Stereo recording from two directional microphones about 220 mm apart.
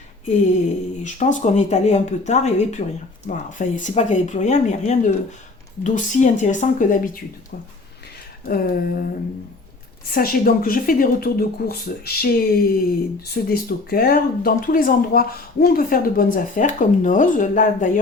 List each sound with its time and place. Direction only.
1.0 s speech: 35° left (ahead or behind)
8.4 s speech: 40° left (ahead or behind)
10.2 s speech: 40° left (ahead or behind)